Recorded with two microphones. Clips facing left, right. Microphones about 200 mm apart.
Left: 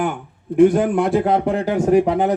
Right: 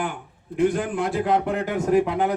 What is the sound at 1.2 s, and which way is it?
Speech, 30° left (ahead or behind).